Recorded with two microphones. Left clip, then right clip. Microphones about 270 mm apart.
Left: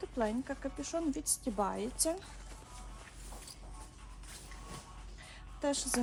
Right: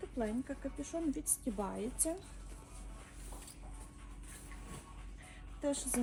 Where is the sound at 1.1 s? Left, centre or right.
Left.